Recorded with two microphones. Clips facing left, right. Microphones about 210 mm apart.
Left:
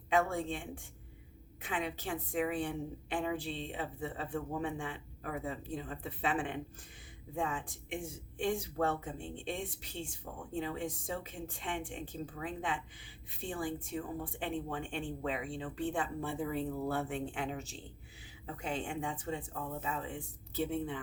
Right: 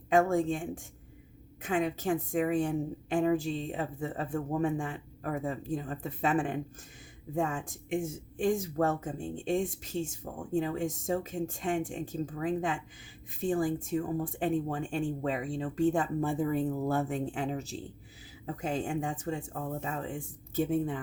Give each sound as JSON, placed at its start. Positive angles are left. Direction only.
{"t": 0.1, "sound": "speech", "side_deg": -45}